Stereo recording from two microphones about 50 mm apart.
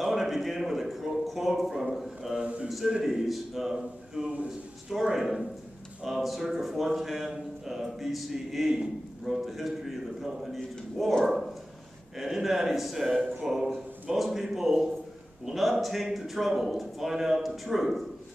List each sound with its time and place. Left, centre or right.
0.0 s a man's voice: centre
2.4 s speech: right
3.0 s a man's voice: centre